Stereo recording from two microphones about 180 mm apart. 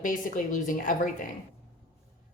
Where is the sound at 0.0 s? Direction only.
50° left (ahead or behind).